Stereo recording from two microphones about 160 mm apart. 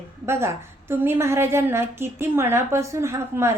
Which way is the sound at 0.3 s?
15° right (ahead or behind).